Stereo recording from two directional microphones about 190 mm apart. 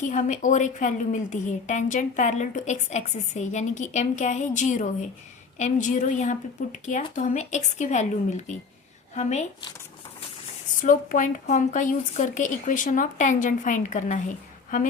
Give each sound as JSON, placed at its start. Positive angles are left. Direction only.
{"t": 0.1, "sound": "a woman's voice", "side_deg": 40}
{"t": 10.8, "sound": "a woman's voice", "side_deg": 45}